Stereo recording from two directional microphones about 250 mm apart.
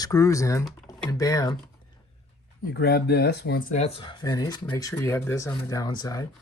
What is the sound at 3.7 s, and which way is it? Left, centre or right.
Speech, left.